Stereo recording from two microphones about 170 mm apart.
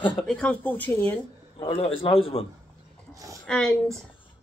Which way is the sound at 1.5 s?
35° left (ahead or behind).